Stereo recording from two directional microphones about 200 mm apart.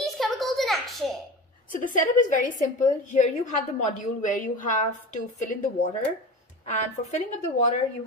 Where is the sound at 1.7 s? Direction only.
40° left (ahead or behind).